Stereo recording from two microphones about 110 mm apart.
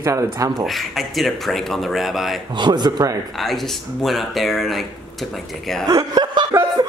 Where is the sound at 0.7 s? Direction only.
Centre (ahead or behind).